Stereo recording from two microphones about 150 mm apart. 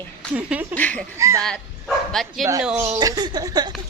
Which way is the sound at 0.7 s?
10° left (ahead or behind).